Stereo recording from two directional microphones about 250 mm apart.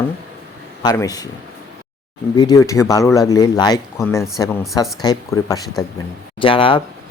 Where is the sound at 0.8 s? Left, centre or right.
Centre.